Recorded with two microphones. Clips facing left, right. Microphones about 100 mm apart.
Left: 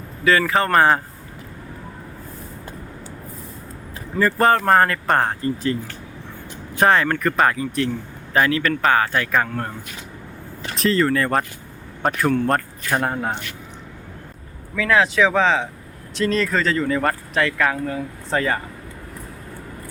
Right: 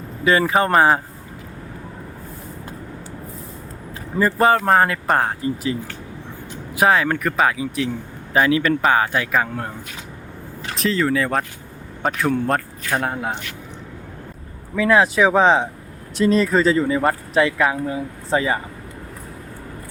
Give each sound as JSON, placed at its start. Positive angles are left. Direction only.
{"t": 0.3, "sound": "speech", "side_deg": -20}
{"t": 0.7, "sound": "speech", "side_deg": -10}
{"t": 4.4, "sound": "speech", "side_deg": -5}
{"t": 6.7, "sound": "speech", "side_deg": -5}
{"t": 10.8, "sound": "speech", "side_deg": 0}
{"t": 14.8, "sound": "speech", "side_deg": -10}